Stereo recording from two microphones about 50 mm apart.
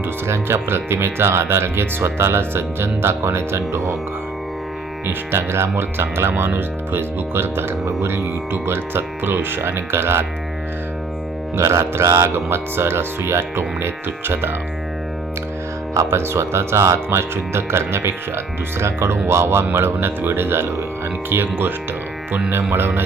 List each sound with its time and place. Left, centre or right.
0.3 s speech: right
5.0 s speech: right
7.9 s speech: right
8.5 s speech: right
11.5 s music: right
12.5 s speech: right
16.0 s speech: right